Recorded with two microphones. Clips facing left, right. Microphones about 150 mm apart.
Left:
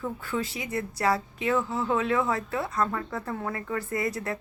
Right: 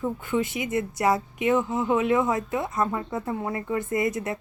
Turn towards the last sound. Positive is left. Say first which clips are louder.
# right 4 dB
turn(degrees=-20)  # may be behind; listen again after turning